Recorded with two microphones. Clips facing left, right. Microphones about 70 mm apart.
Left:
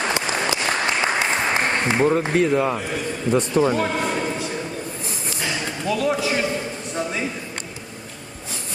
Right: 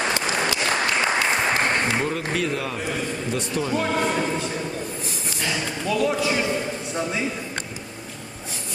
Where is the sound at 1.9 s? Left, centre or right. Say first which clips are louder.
Left 6 dB; left.